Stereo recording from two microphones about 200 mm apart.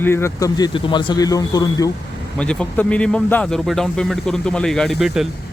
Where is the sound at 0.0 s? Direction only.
10° left (ahead or behind).